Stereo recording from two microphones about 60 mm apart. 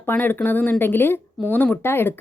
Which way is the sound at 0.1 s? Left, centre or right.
Left.